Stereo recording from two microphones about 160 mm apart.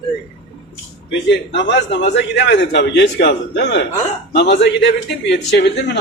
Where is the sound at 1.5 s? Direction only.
90° left.